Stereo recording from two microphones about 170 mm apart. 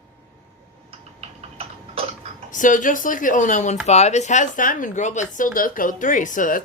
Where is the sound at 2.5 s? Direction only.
50° left (ahead or behind).